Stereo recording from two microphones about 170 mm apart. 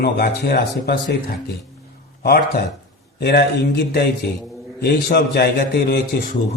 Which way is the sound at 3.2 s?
70° left (ahead or behind).